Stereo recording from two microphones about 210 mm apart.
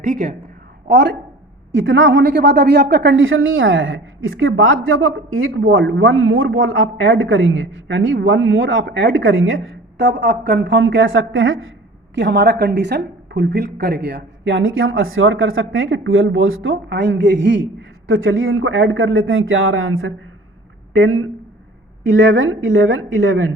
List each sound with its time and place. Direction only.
0.0 s a woman's voice: 40° right (ahead or behind)
0.9 s a woman's voice: 55° right (ahead or behind); by 20.1 s 75° right (ahead or behind)
21.0 s speech: 90° right
22.0 s a woman's voice: 65° right (ahead or behind)